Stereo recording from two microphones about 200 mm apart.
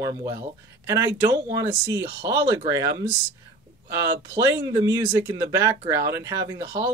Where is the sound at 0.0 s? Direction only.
20° right (ahead or behind).